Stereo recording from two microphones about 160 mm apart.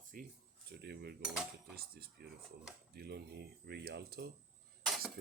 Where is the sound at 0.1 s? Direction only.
60° right (ahead or behind).